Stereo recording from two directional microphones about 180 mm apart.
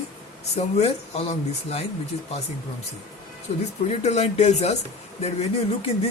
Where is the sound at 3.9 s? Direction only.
35° left (ahead or behind).